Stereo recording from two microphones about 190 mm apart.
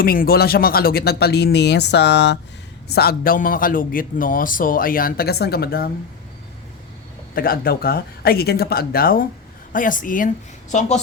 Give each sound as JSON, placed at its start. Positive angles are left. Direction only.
{"t": 0.0, "sound": "speech", "side_deg": 50}
{"t": 2.9, "sound": "a man's voice", "side_deg": 55}
{"t": 7.3, "sound": "a man's voice", "side_deg": 50}